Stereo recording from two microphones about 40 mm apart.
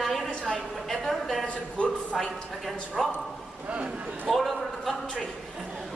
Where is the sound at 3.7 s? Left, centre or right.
Right.